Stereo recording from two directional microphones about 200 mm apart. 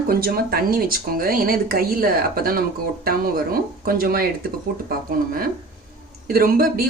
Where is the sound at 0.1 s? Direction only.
50° right (ahead or behind).